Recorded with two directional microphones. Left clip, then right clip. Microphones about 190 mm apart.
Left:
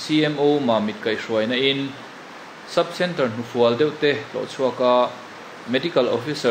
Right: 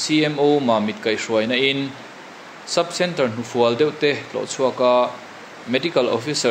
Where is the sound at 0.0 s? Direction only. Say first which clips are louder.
Right 1 dB; 30° right (ahead or behind).